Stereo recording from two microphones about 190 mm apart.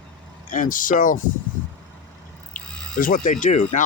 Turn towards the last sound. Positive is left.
turn(degrees=40)  # may be behind; listen again after turning